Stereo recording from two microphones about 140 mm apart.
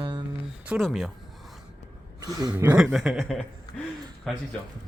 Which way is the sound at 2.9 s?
5° right (ahead or behind).